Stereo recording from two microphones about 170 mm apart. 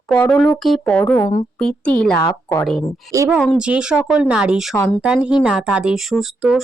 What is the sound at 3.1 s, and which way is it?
Speech, 20° right (ahead or behind).